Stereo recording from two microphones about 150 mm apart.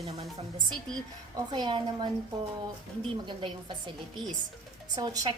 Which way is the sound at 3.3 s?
35° right (ahead or behind).